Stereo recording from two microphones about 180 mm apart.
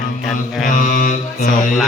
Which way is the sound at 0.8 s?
45° left (ahead or behind).